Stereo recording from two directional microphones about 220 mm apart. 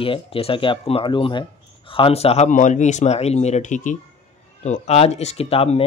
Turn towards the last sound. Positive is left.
turn(degrees=25)  # may be behind; listen again after turning